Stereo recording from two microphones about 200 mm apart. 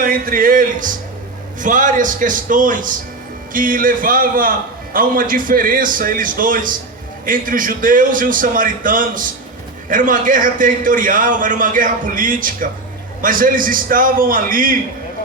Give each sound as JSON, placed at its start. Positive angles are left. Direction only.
{"t": 0.0, "sound": "a man's voice", "side_deg": -45}